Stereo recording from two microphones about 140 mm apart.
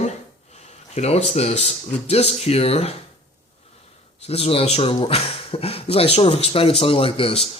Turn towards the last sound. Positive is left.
turn(degrees=40)  # may be behind; listen again after turning